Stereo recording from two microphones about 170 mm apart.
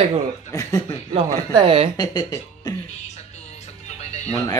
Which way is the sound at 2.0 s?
25° left (ahead or behind).